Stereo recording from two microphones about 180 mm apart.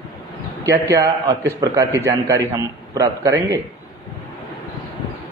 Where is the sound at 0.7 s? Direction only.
20° right (ahead or behind).